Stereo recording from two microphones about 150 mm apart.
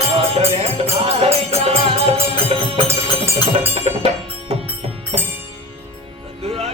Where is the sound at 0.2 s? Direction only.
40° right (ahead or behind).